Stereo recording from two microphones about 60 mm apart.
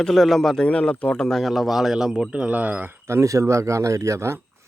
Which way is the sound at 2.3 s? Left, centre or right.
Right.